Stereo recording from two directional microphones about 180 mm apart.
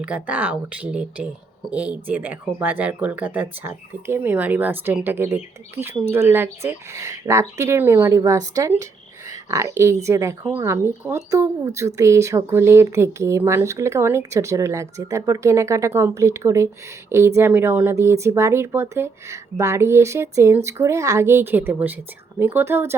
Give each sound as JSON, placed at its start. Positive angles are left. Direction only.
{"t": 0.0, "sound": "speech", "side_deg": -10}